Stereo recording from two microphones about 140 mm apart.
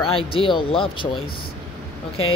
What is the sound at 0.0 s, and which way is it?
Speech, 40° left (ahead or behind).